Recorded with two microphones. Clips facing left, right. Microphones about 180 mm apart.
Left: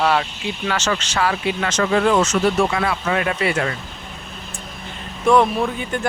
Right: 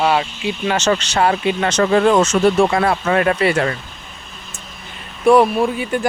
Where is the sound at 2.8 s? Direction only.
45° right (ahead or behind).